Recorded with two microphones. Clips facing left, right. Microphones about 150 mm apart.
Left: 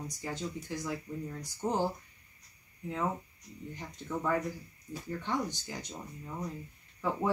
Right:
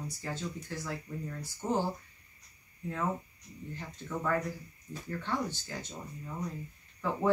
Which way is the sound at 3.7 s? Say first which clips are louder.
Left 1 dB; 15° left (ahead or behind).